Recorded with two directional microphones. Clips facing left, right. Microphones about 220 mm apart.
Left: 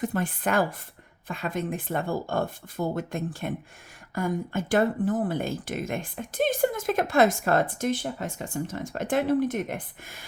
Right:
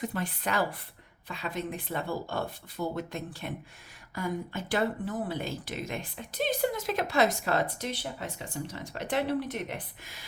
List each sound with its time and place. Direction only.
0.0 s speech: 50° left (ahead or behind)